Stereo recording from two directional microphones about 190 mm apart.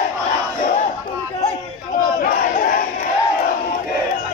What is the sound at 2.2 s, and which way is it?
Battle cry, 45° left (ahead or behind).